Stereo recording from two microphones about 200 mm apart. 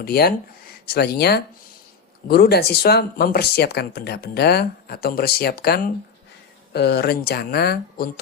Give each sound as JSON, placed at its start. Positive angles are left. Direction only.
{"t": 0.0, "sound": "speech", "side_deg": 50}